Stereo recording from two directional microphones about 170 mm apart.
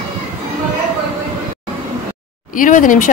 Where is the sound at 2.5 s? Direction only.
50° left (ahead or behind).